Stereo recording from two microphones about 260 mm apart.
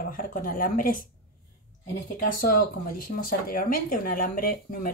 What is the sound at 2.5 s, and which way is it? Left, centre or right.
A woman's voice, left.